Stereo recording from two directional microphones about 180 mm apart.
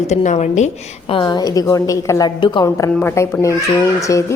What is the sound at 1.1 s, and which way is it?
A woman's voice, 25° left (ahead or behind).